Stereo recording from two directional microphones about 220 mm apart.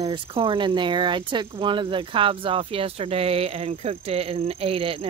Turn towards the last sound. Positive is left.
turn(degrees=-25)  # may be behind; listen again after turning